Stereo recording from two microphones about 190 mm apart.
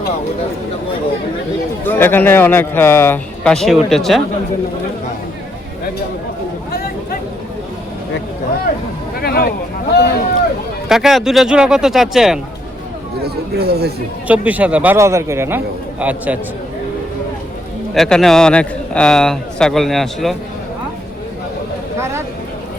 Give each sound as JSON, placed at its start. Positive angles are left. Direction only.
{"t": 1.8, "sound": "a man's voice", "side_deg": 10}
{"t": 9.2, "sound": "speech", "side_deg": 55}
{"t": 10.8, "sound": "a man's voice", "side_deg": 0}
{"t": 13.2, "sound": "speech", "side_deg": -55}
{"t": 14.3, "sound": "a man's voice", "side_deg": -5}
{"t": 17.9, "sound": "a man's voice", "side_deg": 0}